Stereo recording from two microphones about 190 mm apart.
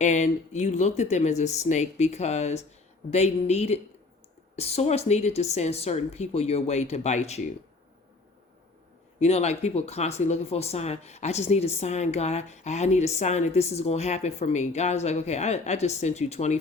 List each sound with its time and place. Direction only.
0.0 s speech: 40° left (ahead or behind)
9.2 s speech: 35° left (ahead or behind)